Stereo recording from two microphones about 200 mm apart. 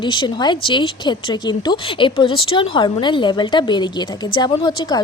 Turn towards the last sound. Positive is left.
turn(degrees=20)  # may be behind; listen again after turning